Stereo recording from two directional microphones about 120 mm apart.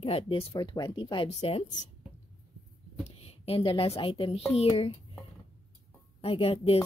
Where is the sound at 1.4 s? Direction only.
55° left (ahead or behind).